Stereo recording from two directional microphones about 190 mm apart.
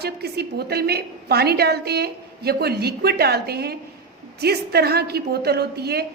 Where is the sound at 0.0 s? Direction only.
60° right (ahead or behind).